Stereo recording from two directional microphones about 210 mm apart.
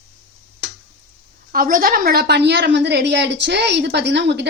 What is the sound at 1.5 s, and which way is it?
A woman's voice, 45° right (ahead or behind).